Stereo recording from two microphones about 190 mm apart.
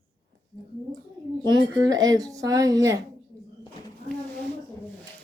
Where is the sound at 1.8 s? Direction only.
20° right (ahead or behind).